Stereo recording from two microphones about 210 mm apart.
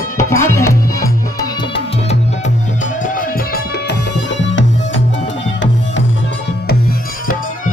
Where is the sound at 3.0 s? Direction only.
40° left (ahead or behind).